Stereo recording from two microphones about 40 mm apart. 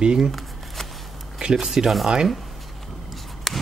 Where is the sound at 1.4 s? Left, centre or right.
Centre.